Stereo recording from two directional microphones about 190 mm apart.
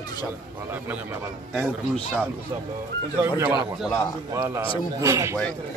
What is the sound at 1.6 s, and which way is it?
Speech, 5° left (ahead or behind).